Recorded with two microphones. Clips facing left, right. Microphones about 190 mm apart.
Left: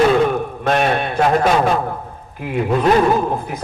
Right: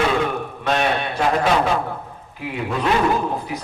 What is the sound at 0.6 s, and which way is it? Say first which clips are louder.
A man's voice: left 3 dB; 50° left (ahead or behind).